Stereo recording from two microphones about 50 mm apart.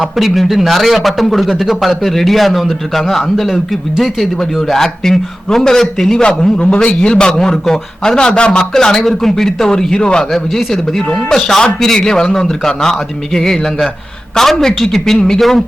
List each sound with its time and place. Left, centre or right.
0.0 s a man's voice: centre
4.7 s a man's voice: centre
6.2 s a man's voice: left; by 15.6 s centre